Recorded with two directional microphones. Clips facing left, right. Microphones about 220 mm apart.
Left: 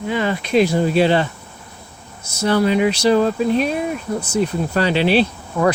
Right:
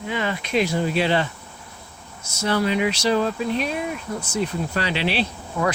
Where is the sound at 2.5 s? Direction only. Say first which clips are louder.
Left 5 dB; 40° left (ahead or behind).